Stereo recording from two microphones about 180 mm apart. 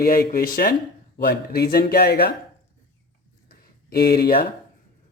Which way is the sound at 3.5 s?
55° left (ahead or behind).